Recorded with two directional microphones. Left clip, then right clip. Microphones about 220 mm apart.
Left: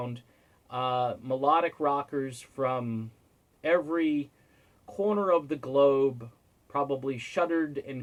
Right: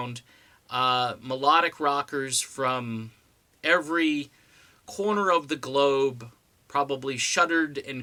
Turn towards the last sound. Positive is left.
turn(degrees=-15)  # may be behind; listen again after turning